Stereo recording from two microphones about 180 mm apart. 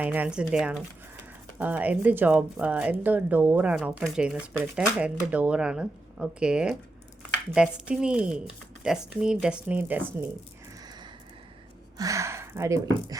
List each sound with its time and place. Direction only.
0.0 s speech: 10° right (ahead or behind)
11.9 s speech: 15° right (ahead or behind)